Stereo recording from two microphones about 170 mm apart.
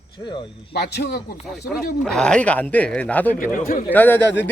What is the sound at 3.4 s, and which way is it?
Speech, 50° left (ahead or behind).